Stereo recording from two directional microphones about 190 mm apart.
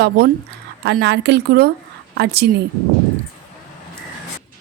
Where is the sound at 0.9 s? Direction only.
65° right (ahead or behind).